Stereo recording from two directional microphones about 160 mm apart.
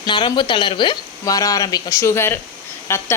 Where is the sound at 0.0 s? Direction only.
25° left (ahead or behind).